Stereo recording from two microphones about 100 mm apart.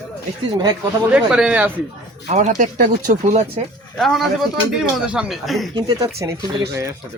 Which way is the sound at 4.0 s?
Centre (ahead or behind).